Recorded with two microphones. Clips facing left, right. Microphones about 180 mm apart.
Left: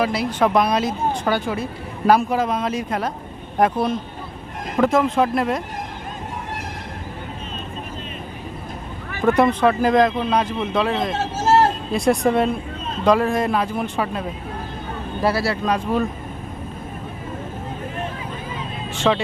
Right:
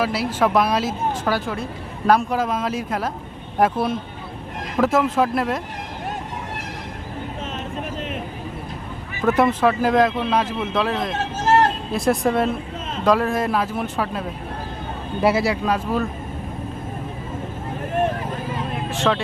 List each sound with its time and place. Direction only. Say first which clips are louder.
0.0 s speech: left 1 dB; 5° right (ahead or behind)
9.2 s speech: left 1 dB; 5° right (ahead or behind)
11.4 s vehicle: left 1 dB; 25° left (ahead or behind)
11.9 s speech: left 2 dB; centre (ahead or behind)
15.2 s speech: right 2 dB; 20° right (ahead or behind)
15.6 s speech: left 1 dB; 5° right (ahead or behind)
18.5 s vehicle: right 4 dB; 55° right (ahead or behind)
18.9 s music: left 2 dB; centre (ahead or behind)